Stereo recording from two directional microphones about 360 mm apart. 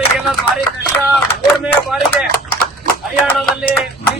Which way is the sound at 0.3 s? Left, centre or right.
Centre.